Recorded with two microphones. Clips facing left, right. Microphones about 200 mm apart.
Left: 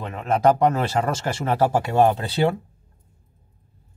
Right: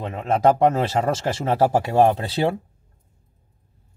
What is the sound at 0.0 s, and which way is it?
Speech, 25° right (ahead or behind).